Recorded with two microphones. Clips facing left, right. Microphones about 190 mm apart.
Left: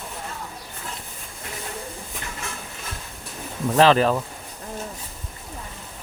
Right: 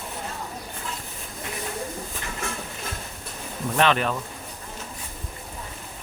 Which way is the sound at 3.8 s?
35° left (ahead or behind).